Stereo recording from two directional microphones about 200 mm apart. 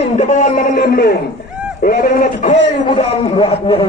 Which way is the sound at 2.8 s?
25° left (ahead or behind).